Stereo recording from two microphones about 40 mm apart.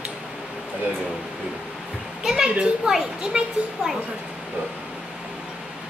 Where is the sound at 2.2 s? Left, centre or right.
Centre.